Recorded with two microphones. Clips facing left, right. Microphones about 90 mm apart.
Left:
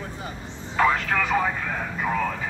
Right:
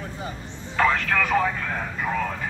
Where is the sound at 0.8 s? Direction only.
20° left (ahead or behind).